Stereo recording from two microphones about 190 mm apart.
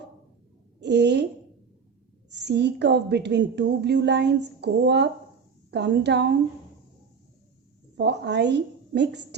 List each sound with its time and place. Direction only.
0.8 s a woman's voice: 65° right (ahead or behind)
2.3 s a woman's voice: 65° right (ahead or behind)
7.9 s a woman's voice: 65° right (ahead or behind)